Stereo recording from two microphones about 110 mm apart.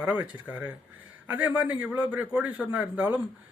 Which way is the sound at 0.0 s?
10° right (ahead or behind).